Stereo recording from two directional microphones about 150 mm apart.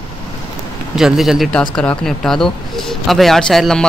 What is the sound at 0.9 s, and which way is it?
Speech, centre (ahead or behind).